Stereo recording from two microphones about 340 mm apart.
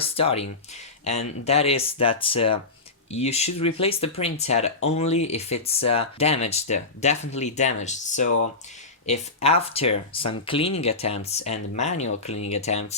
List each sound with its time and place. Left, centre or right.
0.0 s speech: centre